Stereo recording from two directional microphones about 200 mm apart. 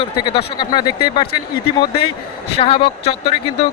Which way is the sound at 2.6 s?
25° left (ahead or behind).